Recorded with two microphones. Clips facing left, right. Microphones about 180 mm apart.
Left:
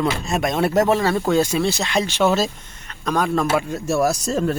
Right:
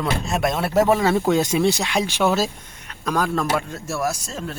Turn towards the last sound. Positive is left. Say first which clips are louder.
# left 7 dB
turn(degrees=45)  # may be behind; listen again after turning